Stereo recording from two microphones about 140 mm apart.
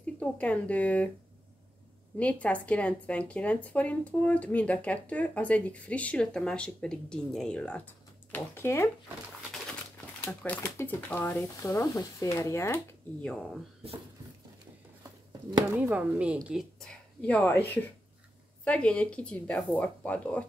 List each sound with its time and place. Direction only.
0.0 s speech: 10° left (ahead or behind)
2.1 s a woman's voice: 10° left (ahead or behind)
10.2 s a woman's voice: 10° left (ahead or behind)
13.2 s speech: 5° left (ahead or behind)
15.7 s speech: 10° right (ahead or behind)
16.8 s a woman's voice: 5° left (ahead or behind)